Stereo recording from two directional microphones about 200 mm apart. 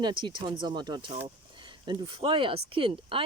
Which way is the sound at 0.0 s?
25° right (ahead or behind).